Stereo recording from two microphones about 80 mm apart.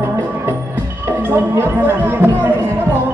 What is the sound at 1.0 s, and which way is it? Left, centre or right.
Speech, right.